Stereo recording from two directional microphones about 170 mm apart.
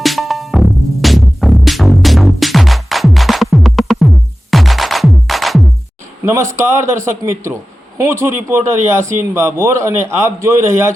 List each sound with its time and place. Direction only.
0.0 s music: centre (ahead or behind)
6.5 s a man's voice: 15° right (ahead or behind)